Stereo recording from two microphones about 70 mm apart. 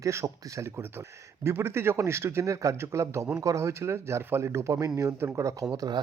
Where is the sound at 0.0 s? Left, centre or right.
Right.